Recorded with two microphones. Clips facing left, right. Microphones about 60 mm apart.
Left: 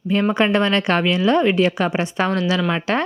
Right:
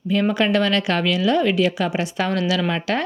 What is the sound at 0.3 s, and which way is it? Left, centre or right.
Speech, left.